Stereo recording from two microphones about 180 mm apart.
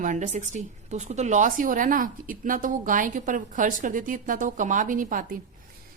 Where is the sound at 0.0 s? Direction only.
45° right (ahead or behind).